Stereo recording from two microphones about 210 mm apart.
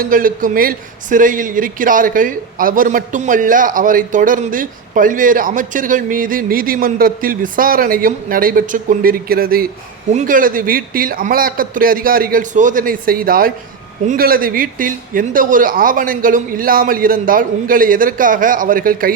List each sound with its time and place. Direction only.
0.0 s a man's voice: 40° right (ahead or behind)